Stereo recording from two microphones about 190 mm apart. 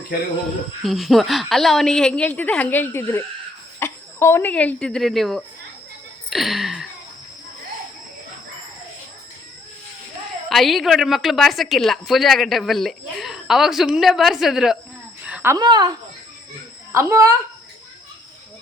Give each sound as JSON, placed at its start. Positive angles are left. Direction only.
{"t": 0.8, "sound": "a woman's voice", "side_deg": 0}
{"t": 6.3, "sound": "a sound", "side_deg": 0}
{"t": 10.5, "sound": "a woman's voice", "side_deg": 0}
{"t": 16.9, "sound": "speech", "side_deg": -15}